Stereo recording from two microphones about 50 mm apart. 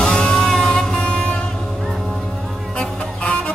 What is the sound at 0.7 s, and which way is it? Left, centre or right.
Music, centre.